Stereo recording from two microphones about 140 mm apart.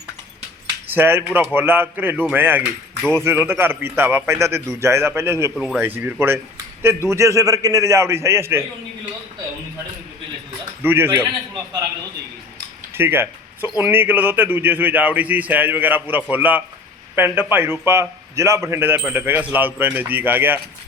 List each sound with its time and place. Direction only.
0.9 s a man's voice: 15° right (ahead or behind)
5.5 s a man's voice: centre (ahead or behind)
5.8 s a man's voice: 15° right (ahead or behind)
10.8 s a man's voice: 15° right (ahead or behind)
12.9 s a man's voice: 15° right (ahead or behind)